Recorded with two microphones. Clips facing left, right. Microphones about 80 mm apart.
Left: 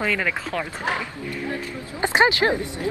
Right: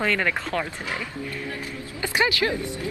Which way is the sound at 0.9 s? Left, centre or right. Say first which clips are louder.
Left 2 dB; left.